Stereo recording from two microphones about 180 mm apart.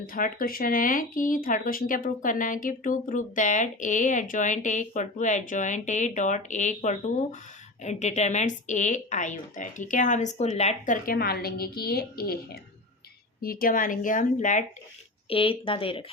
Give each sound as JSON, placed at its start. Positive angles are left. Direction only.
{"t": 0.1, "sound": "speech", "side_deg": 50}
{"t": 15.3, "sound": "a woman's voice", "side_deg": 30}